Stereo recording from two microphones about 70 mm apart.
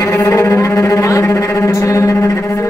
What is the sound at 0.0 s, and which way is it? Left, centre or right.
Music, left.